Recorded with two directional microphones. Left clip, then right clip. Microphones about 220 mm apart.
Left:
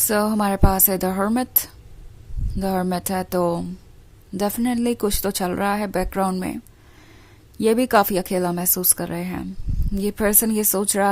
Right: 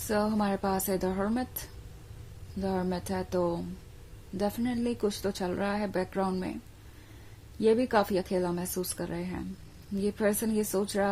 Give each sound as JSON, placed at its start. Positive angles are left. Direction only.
{"t": 0.1, "sound": "speech", "side_deg": 35}
{"t": 7.6, "sound": "speech", "side_deg": 35}